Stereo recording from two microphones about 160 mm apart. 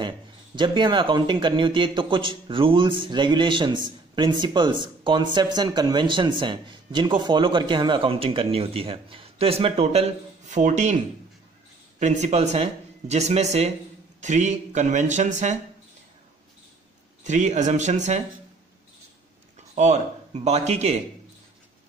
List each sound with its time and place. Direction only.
0.6 s a man's voice: 30° right (ahead or behind); by 11.0 s 45° right (ahead or behind)
12.0 s speech: 45° right (ahead or behind)
17.2 s speech: 50° right (ahead or behind)
19.7 s speech: 45° right (ahead or behind)